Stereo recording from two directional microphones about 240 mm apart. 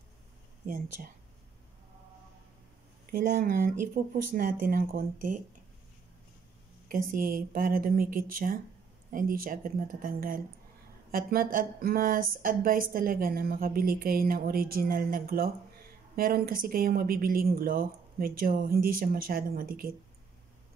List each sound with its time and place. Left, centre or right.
3.1 s speech: right
7.1 s speech: right